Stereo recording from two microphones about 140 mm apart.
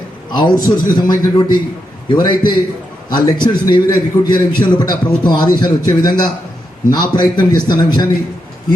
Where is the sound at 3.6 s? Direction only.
30° left (ahead or behind).